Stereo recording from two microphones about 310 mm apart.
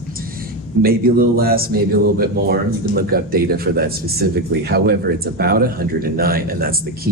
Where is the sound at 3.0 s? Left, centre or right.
Right.